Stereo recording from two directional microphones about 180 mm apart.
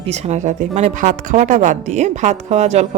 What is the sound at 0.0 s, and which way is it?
Speech, 40° right (ahead or behind).